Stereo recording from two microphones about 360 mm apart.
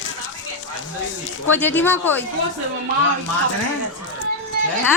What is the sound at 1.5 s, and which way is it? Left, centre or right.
Speech, centre.